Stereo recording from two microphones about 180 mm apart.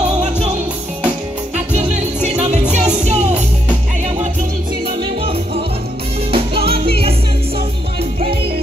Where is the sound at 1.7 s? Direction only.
40° right (ahead or behind).